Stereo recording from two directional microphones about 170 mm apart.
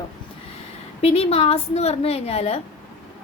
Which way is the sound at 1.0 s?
35° left (ahead or behind).